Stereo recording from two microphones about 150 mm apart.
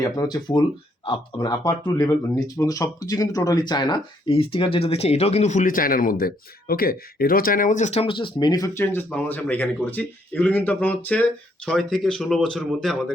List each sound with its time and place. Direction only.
0.2 s speech: 25° left (ahead or behind); by 8.0 s 55° left (ahead or behind)
8.0 s speech: 35° left (ahead or behind); by 13.1 s centre (ahead or behind)